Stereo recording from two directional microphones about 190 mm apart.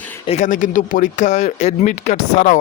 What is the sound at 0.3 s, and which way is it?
Speech, 40° left (ahead or behind).